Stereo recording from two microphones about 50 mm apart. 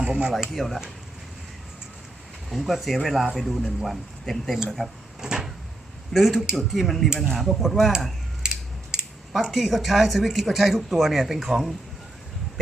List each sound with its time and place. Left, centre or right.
0.0 s speech: centre
0.5 s speech: centre
2.5 s speech: centre
5.2 s cupboard open or close: centre
6.1 s speech: centre
9.4 s speech: centre